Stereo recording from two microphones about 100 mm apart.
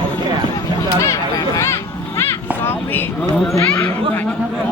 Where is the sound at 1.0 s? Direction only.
30° left (ahead or behind).